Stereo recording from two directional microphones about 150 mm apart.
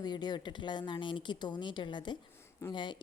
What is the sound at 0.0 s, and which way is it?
A woman's voice, 30° left (ahead or behind).